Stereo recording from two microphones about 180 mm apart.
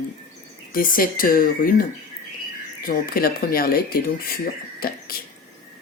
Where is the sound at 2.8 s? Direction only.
55° left (ahead or behind).